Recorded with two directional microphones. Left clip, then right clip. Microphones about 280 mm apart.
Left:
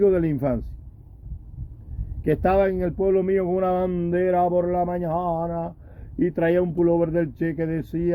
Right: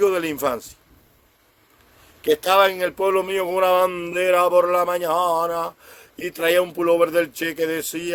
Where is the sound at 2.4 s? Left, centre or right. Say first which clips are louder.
Right 3 dB; centre.